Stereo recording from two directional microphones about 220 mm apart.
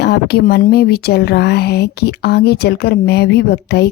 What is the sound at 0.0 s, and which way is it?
A woman's voice, 45° left (ahead or behind).